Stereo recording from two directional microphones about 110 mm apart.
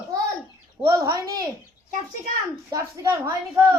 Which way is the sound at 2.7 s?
30° right (ahead or behind).